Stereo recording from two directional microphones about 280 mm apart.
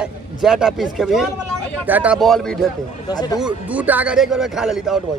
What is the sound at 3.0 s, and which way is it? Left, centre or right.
Speech, centre.